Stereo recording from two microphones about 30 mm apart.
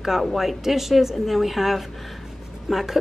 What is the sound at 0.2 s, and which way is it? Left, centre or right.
A woman's voice, centre.